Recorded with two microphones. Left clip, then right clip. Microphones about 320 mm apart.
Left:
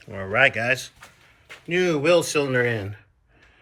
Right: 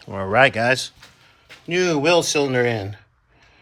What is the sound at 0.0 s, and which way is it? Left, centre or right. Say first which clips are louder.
Speech: right 3 dB; centre.